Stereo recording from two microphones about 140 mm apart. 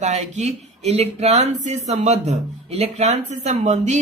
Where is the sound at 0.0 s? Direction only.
55° right (ahead or behind).